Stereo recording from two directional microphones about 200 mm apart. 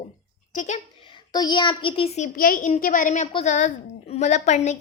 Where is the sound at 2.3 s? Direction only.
45° left (ahead or behind).